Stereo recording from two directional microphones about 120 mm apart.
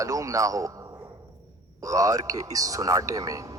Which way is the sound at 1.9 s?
30° right (ahead or behind).